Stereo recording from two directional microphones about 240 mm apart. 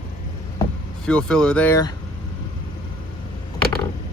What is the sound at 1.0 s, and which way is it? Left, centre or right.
Speech, centre.